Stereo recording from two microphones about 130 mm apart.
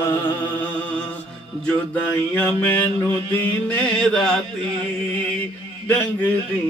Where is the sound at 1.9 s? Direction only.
10° left (ahead or behind).